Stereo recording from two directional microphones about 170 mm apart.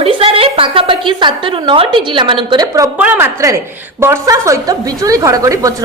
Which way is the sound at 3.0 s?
10° right (ahead or behind).